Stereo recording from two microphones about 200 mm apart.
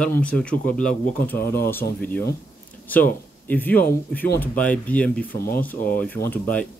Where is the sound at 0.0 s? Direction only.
5° left (ahead or behind).